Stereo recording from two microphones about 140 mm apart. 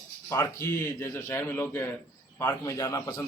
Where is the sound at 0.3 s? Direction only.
20° left (ahead or behind).